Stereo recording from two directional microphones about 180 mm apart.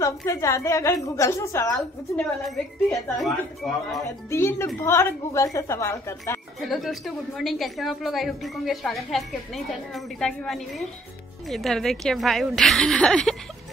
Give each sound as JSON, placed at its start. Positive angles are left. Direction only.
{"t": 0.0, "sound": "a woman's voice", "side_deg": 15}
{"t": 1.8, "sound": "a woman's voice", "side_deg": 0}
{"t": 4.3, "sound": "a woman's voice", "side_deg": 15}
{"t": 6.6, "sound": "a woman's voice", "side_deg": 0}